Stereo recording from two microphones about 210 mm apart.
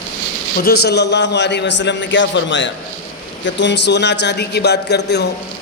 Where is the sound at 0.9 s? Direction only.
55° left (ahead or behind).